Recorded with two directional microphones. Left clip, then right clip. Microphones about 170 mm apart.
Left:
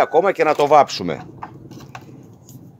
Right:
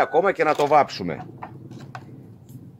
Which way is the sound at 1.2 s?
5° right (ahead or behind).